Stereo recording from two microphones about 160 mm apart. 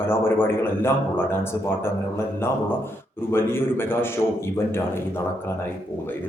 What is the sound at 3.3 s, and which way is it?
Speech, 15° left (ahead or behind).